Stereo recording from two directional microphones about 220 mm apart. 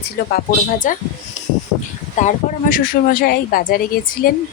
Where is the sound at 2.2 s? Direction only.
35° left (ahead or behind).